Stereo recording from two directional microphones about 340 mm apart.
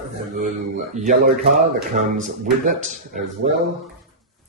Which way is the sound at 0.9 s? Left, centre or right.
Centre.